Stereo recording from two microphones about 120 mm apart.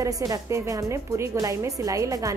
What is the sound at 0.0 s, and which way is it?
A woman's voice, 30° right (ahead or behind).